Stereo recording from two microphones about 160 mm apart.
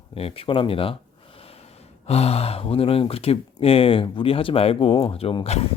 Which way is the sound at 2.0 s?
40° left (ahead or behind).